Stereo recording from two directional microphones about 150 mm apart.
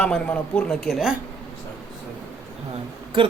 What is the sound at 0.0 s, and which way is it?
Speech, 10° left (ahead or behind).